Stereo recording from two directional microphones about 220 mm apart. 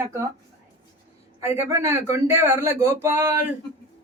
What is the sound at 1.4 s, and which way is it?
Speech, 10° right (ahead or behind).